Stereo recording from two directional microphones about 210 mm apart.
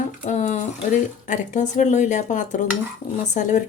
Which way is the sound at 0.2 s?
35° left (ahead or behind).